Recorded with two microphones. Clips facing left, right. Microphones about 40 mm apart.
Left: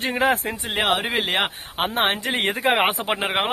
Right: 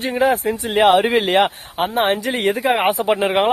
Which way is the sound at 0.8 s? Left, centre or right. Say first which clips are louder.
Right 8 dB; centre.